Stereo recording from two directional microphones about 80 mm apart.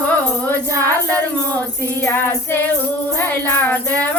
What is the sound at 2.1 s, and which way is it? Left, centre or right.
Music, left.